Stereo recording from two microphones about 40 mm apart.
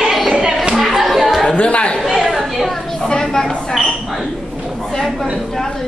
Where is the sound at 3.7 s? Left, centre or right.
Centre.